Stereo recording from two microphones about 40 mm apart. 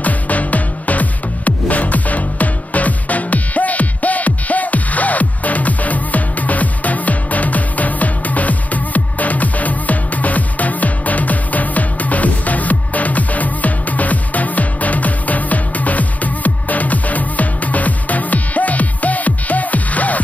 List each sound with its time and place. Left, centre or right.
0.0 s music: left